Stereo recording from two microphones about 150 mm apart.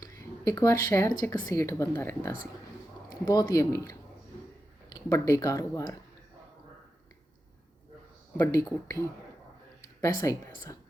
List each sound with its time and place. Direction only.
0.0 s speech: 20° left (ahead or behind)
3.5 s speech: 20° left (ahead or behind)
8.4 s speech: 20° left (ahead or behind)